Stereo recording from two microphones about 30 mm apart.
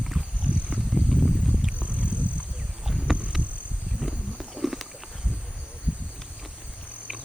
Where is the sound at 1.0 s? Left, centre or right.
Centre.